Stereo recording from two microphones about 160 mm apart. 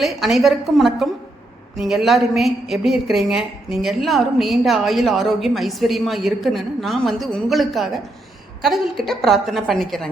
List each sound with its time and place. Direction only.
0.0 s a woman's voice: centre (ahead or behind)